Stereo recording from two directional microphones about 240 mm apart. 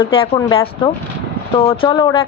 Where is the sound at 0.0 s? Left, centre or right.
Left.